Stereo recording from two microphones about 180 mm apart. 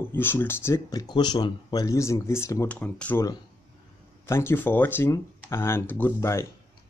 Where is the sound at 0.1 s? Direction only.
10° left (ahead or behind).